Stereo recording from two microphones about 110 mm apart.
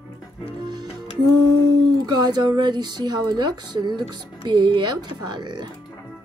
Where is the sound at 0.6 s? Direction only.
40° right (ahead or behind).